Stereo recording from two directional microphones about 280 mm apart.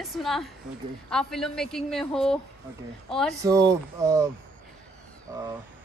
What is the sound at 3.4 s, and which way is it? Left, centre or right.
Speech, centre.